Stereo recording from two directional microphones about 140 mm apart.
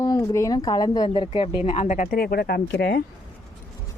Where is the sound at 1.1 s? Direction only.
40° left (ahead or behind).